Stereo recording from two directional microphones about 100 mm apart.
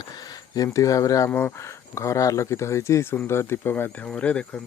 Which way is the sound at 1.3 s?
20° left (ahead or behind).